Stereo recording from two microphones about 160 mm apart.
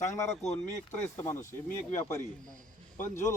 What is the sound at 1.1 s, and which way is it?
Speech, 15° left (ahead or behind).